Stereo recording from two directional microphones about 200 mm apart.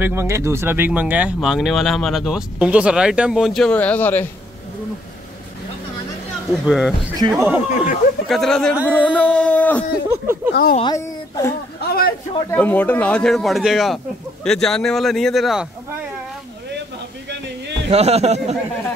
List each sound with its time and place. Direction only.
0.0 s speech: 10° right (ahead or behind); by 4.3 s 10° left (ahead or behind)
6.6 s speech: 5° right (ahead or behind)
7.2 s speech: 20° right (ahead or behind)
7.4 s speech: 5° right (ahead or behind)
8.8 s a sound: 10° left (ahead or behind)
10.1 s speech: 10° right (ahead or behind)
10.5 s speech: 50° left (ahead or behind)
10.8 s a woman's voice: 20° left (ahead or behind)
11.8 s a sound: 50° left (ahead or behind)
12.4 s speech: 10° left (ahead or behind)
17.8 s speech: 30° right (ahead or behind)